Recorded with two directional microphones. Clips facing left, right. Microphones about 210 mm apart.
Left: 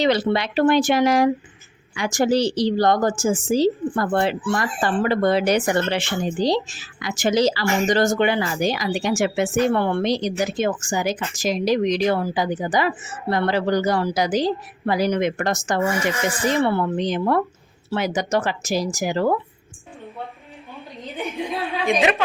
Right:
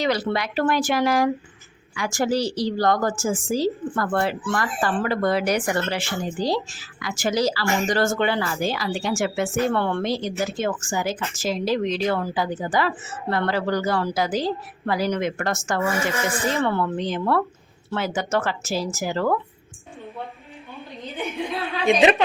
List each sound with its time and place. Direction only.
0.0 s a woman's voice: 25° left (ahead or behind)
21.0 s a woman's voice: centre (ahead or behind)
21.3 s a sound: 15° left (ahead or behind)